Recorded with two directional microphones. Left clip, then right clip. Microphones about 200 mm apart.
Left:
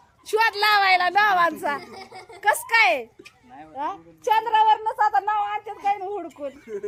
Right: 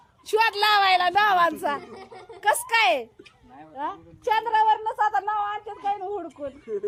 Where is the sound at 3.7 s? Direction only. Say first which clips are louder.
Left 2 dB; centre (ahead or behind).